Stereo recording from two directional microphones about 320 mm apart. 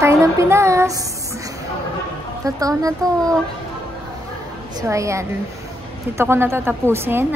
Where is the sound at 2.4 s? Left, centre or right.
Centre.